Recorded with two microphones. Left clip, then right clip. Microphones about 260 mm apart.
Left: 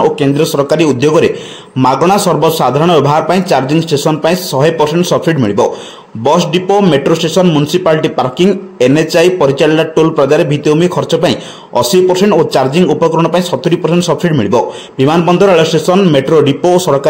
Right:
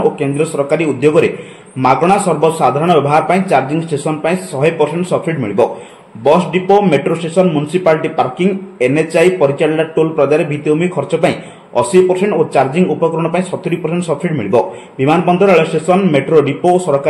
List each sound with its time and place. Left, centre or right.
0.2 s speech: left